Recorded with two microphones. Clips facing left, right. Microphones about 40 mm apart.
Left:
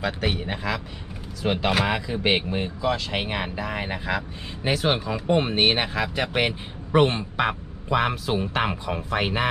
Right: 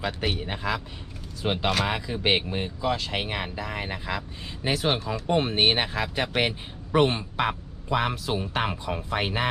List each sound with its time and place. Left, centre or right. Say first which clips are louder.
0.3 s speech: left 1 dB; centre
1.6 s speech: left 3 dB; centre
3.2 s a man's voice: left 3 dB; centre